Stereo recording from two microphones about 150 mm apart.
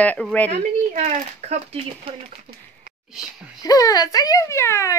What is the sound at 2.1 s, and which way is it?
Speech, 35° right (ahead or behind).